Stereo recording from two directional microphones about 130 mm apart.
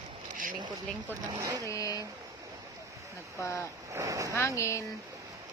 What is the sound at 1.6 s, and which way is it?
Speech, 25° left (ahead or behind).